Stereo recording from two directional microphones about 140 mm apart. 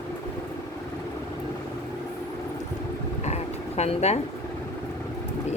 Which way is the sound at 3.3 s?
50° left (ahead or behind).